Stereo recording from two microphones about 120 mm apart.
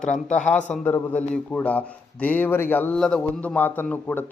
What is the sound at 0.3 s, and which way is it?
A man's voice, 10° left (ahead or behind).